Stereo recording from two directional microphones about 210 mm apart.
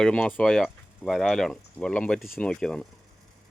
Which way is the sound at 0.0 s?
5° left (ahead or behind).